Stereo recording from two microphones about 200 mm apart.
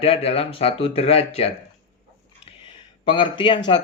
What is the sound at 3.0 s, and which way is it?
Speech, 25° left (ahead or behind).